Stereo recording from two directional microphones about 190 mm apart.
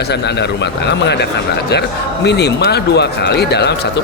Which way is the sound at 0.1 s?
60° left (ahead or behind).